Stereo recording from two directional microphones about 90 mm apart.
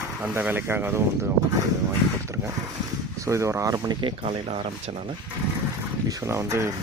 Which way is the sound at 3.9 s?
70° right (ahead or behind).